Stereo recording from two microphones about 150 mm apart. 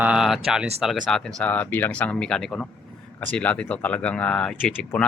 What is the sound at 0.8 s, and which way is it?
Speech, centre (ahead or behind).